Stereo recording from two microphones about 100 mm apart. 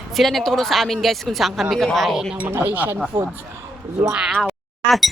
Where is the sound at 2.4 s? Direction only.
20° right (ahead or behind).